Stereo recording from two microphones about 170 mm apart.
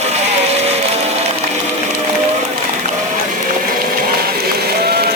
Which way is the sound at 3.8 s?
60° right (ahead or behind).